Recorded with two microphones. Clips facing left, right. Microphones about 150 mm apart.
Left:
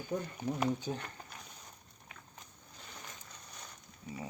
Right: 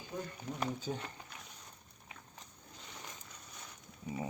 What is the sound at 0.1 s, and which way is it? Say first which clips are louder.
Speech: left 5 dB; 65° left (ahead or behind).